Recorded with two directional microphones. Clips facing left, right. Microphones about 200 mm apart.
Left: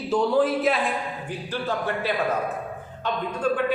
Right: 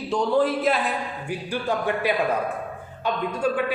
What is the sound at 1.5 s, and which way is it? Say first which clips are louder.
A man's voice: right 2 dB; 15° right (ahead or behind).